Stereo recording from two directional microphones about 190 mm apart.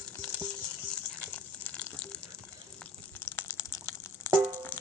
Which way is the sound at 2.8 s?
10° left (ahead or behind).